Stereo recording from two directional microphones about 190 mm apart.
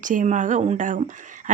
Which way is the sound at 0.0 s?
45° right (ahead or behind).